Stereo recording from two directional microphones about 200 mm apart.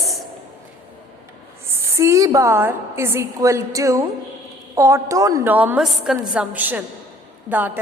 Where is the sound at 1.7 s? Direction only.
15° right (ahead or behind).